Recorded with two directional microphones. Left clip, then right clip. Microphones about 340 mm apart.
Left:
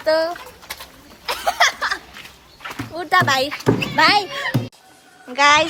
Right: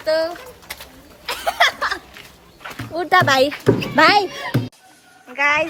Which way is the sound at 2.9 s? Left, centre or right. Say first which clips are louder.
Right 2 dB; centre.